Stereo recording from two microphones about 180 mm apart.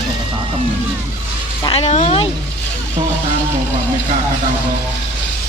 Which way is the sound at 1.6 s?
35° left (ahead or behind).